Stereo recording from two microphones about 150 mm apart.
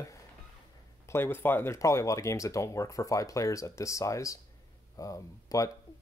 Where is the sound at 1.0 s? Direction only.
15° left (ahead or behind).